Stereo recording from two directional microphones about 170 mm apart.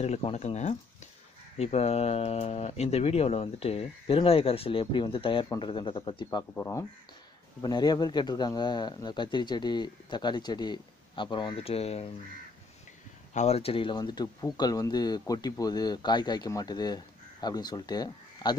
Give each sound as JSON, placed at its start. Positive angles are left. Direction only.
{"t": 0.0, "sound": "speech", "side_deg": 40}
{"t": 6.5, "sound": "speech", "side_deg": 15}
{"t": 7.6, "sound": "speech", "side_deg": 25}
{"t": 13.3, "sound": "speech", "side_deg": 40}